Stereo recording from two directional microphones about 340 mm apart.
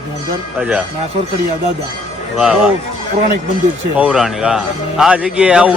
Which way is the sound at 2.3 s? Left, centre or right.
Centre.